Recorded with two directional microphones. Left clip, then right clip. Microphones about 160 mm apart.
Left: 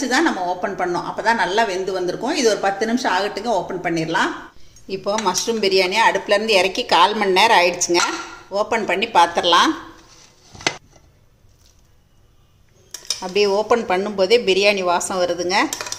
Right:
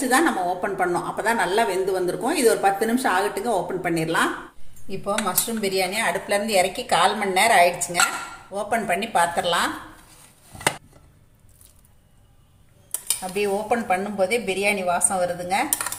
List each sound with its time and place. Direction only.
0.1 s speech: 5° left (ahead or behind)
4.9 s speech: 65° left (ahead or behind)
13.3 s speech: 55° left (ahead or behind)